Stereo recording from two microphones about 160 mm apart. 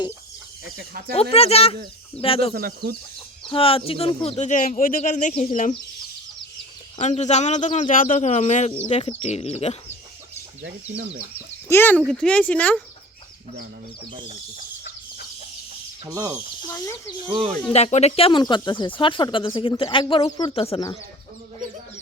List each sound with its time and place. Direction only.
1.1 s speech: 40° left (ahead or behind)
2.6 s speech: 70° right (ahead or behind)
3.5 s speech: 35° left (ahead or behind); by 5.7 s 55° left (ahead or behind)
7.0 s speech: 45° left (ahead or behind)
11.7 s speech: 15° left (ahead or behind)
16.0 s speech: 25° right (ahead or behind)
16.7 s speech: 20° left (ahead or behind)
17.7 s speech: 40° left (ahead or behind)